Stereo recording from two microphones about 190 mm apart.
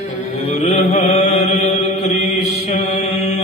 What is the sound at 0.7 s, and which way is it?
Mantra, 35° left (ahead or behind).